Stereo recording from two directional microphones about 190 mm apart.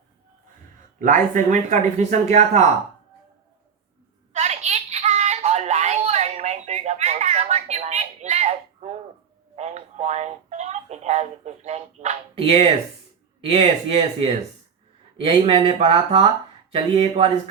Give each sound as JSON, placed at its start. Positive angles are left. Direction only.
{"t": 0.9, "sound": "speech", "side_deg": -40}
{"t": 4.3, "sound": "a sound", "side_deg": -35}
{"t": 9.6, "sound": "telephone", "side_deg": -35}
{"t": 13.5, "sound": "speech", "side_deg": -30}